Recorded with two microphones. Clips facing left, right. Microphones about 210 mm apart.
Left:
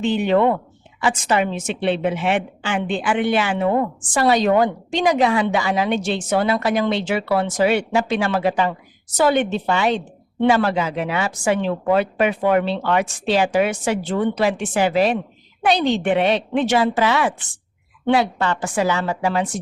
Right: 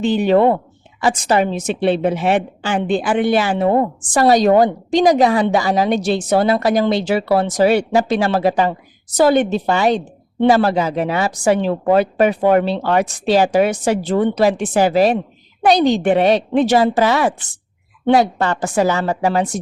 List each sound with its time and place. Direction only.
0.0 s a woman's voice: 35° right (ahead or behind)